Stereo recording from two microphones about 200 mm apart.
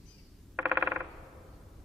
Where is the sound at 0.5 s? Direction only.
10° right (ahead or behind).